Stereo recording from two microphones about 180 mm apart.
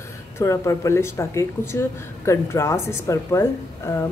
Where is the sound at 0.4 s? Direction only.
15° left (ahead or behind).